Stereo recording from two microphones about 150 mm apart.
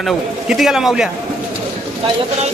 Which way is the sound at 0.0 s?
Centre (ahead or behind).